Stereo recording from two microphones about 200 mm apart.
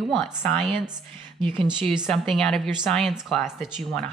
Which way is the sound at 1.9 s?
Centre (ahead or behind).